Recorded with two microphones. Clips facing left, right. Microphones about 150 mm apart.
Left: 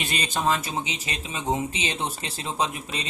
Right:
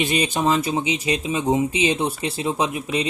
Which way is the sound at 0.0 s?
10° right (ahead or behind).